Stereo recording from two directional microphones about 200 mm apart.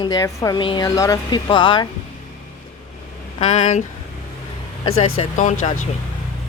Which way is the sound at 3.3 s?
35° left (ahead or behind).